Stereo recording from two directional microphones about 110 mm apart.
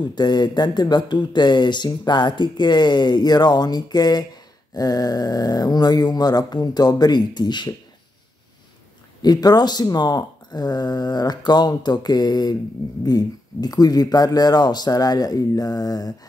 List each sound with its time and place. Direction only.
0.0 s speech: 40° left (ahead or behind)
9.2 s speech: 35° left (ahead or behind)